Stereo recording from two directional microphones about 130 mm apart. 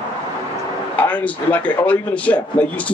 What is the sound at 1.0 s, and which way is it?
Speech, 10° left (ahead or behind).